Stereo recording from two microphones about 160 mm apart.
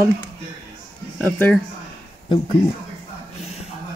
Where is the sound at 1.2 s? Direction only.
10° left (ahead or behind).